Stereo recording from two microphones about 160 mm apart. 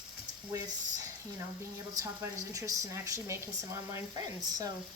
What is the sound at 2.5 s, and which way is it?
Speech, 20° right (ahead or behind).